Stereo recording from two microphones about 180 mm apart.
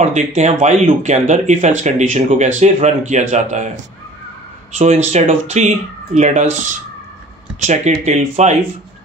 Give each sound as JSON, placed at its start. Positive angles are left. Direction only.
{"t": 0.0, "sound": "speech", "side_deg": -40}
{"t": 4.7, "sound": "speech", "side_deg": -35}